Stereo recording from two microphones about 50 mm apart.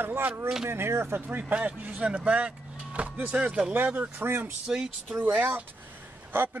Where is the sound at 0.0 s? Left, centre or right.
Right.